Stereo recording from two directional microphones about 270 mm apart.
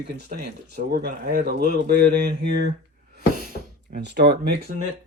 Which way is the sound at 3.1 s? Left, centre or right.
Right.